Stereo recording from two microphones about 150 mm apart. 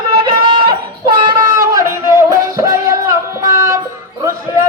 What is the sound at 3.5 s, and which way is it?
Child singing, 20° right (ahead or behind).